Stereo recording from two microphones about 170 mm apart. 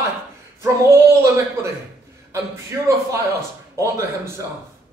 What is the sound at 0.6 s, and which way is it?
A man's voice, 15° right (ahead or behind).